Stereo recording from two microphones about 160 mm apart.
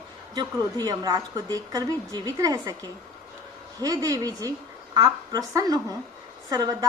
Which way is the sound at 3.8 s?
20° right (ahead or behind).